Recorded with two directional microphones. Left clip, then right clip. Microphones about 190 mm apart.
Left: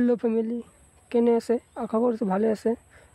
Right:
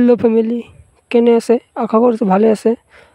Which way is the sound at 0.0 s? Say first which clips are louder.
Right 12 dB; 45° right (ahead or behind).